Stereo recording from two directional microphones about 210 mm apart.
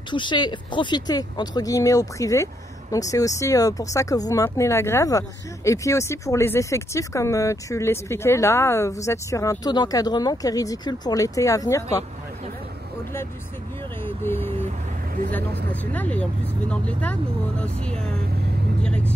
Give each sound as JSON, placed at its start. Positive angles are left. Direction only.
{"t": 0.1, "sound": "speech", "side_deg": 20}
{"t": 14.0, "sound": "vehicle", "side_deg": 10}
{"t": 15.3, "sound": "speech", "side_deg": 5}
{"t": 18.8, "sound": "vehicle", "side_deg": 5}